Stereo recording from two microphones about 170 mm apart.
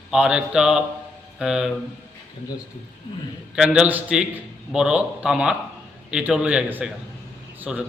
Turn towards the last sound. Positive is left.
turn(degrees=-5)  # may be behind; listen again after turning